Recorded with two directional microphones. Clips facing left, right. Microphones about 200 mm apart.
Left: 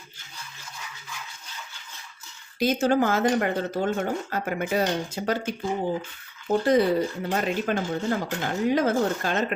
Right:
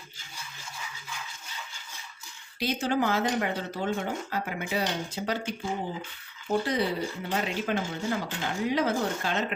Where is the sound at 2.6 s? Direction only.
45° left (ahead or behind).